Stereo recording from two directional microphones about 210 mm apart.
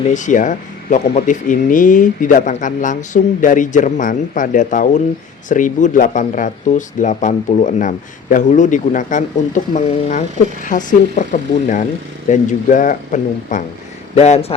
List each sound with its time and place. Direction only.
0.1 s speech: 35° left (ahead or behind)